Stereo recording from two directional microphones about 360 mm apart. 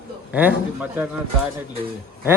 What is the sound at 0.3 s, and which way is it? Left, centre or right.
Speech, centre.